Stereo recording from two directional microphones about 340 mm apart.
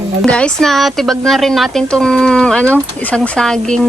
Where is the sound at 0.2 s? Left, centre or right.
Centre.